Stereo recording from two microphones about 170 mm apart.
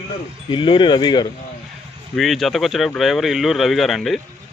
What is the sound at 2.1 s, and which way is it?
Speech, centre (ahead or behind).